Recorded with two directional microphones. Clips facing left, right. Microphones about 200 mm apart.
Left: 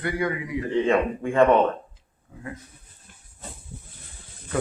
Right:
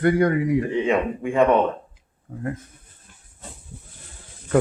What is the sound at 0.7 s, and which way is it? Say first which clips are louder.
Speech: even; 10° right (ahead or behind).